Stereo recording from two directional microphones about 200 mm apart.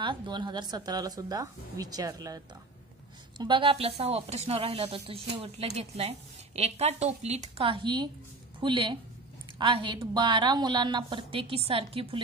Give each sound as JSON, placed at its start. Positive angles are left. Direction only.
{"t": 0.0, "sound": "a woman's voice", "side_deg": -25}